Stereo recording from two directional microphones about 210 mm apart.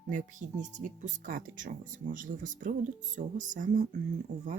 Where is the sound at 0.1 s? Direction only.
40° right (ahead or behind).